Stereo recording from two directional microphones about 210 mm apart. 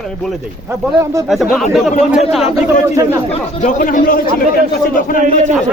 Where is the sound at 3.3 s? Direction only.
35° left (ahead or behind).